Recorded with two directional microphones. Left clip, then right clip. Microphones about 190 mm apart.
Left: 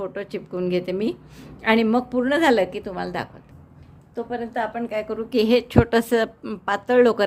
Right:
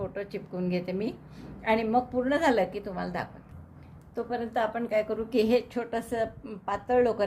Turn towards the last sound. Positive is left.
turn(degrees=40)  # may be behind; listen again after turning